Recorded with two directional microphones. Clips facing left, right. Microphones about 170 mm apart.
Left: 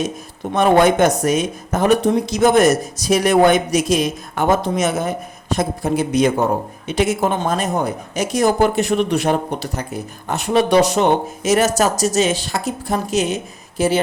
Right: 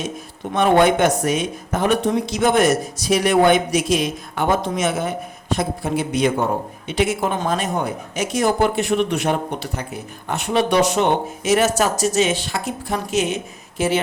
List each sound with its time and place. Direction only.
0.5 s a woman's voice: 45° left (ahead or behind)